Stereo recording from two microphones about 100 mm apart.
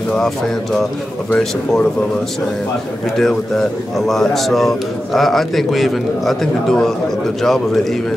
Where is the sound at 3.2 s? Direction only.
5° left (ahead or behind).